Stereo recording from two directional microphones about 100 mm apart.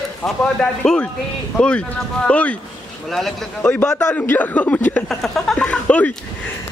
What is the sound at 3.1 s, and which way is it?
Speech, centre (ahead or behind).